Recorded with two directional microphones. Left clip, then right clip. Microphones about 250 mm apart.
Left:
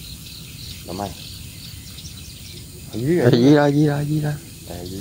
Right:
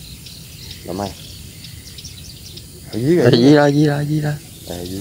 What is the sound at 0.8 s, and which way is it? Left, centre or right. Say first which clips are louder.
Speech: right 4 dB; right.